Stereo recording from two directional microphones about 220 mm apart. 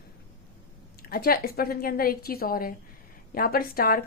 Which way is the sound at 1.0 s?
45° left (ahead or behind).